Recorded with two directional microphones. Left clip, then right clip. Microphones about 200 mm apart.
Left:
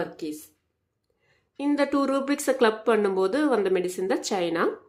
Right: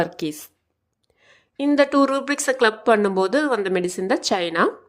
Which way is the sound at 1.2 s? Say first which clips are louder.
Right 7 dB; 40° right (ahead or behind).